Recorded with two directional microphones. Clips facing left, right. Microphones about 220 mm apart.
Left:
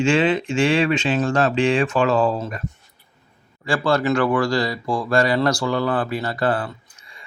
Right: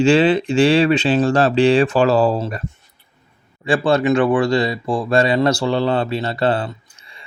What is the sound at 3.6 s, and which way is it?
Speech, 20° right (ahead or behind).